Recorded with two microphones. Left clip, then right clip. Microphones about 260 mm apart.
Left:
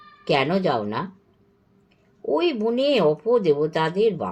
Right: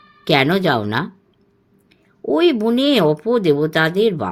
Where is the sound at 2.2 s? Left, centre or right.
Right.